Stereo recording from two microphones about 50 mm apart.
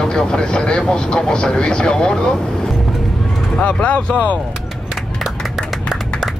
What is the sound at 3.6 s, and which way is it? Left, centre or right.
Speech, left.